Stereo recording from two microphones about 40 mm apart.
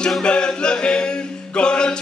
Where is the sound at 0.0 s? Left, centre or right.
Left.